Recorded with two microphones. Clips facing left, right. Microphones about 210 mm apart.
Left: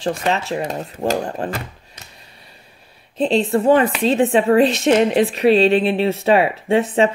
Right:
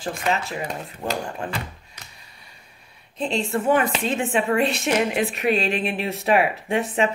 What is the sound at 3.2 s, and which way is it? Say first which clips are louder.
A woman's voice: left 7 dB; 35° left (ahead or behind).